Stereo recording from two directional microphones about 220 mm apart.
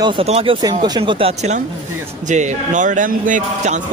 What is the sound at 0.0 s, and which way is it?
A man's voice, 25° right (ahead or behind).